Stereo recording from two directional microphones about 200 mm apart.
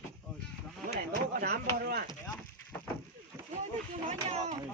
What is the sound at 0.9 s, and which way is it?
Speech, 50° right (ahead or behind).